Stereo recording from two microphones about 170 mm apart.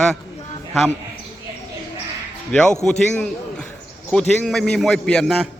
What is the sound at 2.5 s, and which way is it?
A man's voice, 5° left (ahead or behind).